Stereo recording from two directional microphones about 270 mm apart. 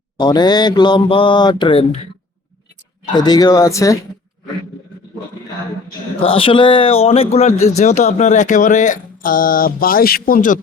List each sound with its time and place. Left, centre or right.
0.2 s mantra: centre
3.2 s mantra: centre
6.1 s speech: centre